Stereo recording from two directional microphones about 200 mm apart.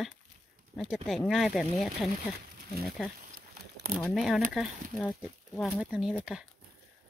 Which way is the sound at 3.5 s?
50° right (ahead or behind).